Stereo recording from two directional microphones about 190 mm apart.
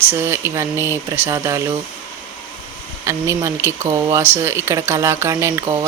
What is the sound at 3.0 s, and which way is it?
Speech, 15° right (ahead or behind).